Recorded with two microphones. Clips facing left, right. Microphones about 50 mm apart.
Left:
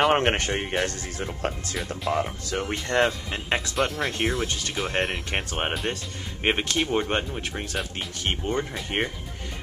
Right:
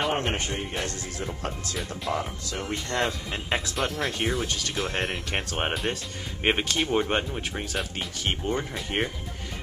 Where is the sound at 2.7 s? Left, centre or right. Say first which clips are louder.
Left 4 dB; centre.